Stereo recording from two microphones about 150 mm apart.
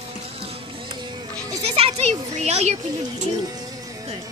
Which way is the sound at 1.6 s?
45° right (ahead or behind).